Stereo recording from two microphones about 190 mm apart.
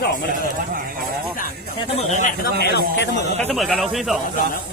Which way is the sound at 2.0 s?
40° left (ahead or behind).